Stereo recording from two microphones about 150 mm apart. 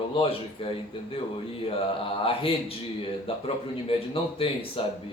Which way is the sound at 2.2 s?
35° left (ahead or behind).